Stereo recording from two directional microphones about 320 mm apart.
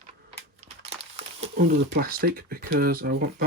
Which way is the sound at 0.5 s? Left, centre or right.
Centre.